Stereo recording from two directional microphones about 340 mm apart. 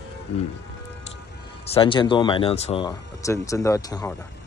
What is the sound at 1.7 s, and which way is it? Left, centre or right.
Speech, centre.